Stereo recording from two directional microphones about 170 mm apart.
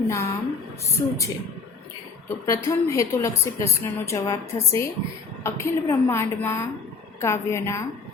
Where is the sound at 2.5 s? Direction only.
20° left (ahead or behind).